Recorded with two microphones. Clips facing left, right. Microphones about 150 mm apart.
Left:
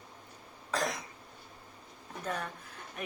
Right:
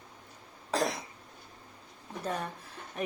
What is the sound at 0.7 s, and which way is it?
Cough, 30° right (ahead or behind).